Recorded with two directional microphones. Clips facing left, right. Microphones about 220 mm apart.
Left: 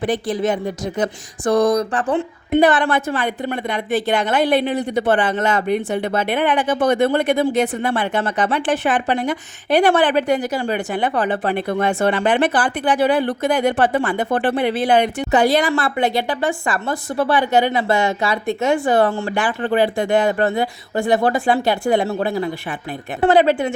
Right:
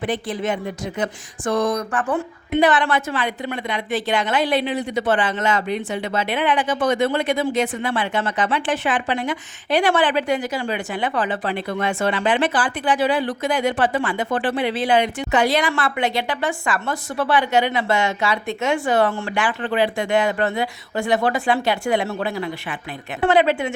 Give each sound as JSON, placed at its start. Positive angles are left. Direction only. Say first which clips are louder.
{"t": 0.0, "sound": "speech", "louder": "left 4 dB", "side_deg": 35}
{"t": 2.5, "sound": "speech", "louder": "left 3 dB", "side_deg": 55}
{"t": 8.4, "sound": "speech", "louder": "left 3 dB", "side_deg": 40}
{"t": 8.7, "sound": "speech", "louder": "left 3 dB", "side_deg": 60}
{"t": 9.0, "sound": "speech", "louder": "left 3 dB", "side_deg": 40}
{"t": 9.6, "sound": "speech", "louder": "left 3 dB", "side_deg": 60}
{"t": 15.3, "sound": "speech", "louder": "left 4 dB", "side_deg": 35}